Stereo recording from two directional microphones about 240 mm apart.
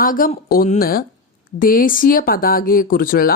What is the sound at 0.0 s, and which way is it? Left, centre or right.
Speech, left.